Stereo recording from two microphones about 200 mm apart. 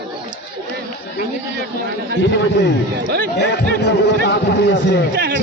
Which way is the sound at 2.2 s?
60° left (ahead or behind).